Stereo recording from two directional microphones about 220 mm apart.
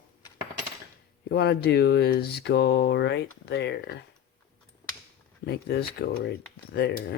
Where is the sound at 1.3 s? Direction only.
50° left (ahead or behind).